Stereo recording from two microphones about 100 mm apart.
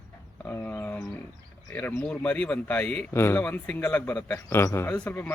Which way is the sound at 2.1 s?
15° left (ahead or behind).